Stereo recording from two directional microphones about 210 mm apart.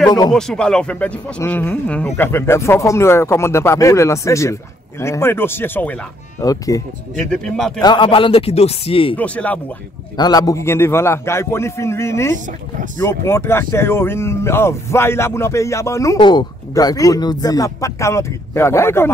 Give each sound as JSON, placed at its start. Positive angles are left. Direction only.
{"t": 0.3, "sound": "speech", "side_deg": 0}
{"t": 7.2, "sound": "speech", "side_deg": 5}
{"t": 7.8, "sound": "a man's voice", "side_deg": 25}
{"t": 9.1, "sound": "speech", "side_deg": 5}
{"t": 10.1, "sound": "speech", "side_deg": 20}